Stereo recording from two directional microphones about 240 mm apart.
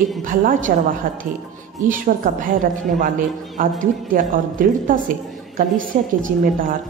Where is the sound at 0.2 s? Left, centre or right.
Right.